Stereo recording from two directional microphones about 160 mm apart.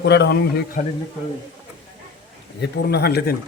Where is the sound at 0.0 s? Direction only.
90° left.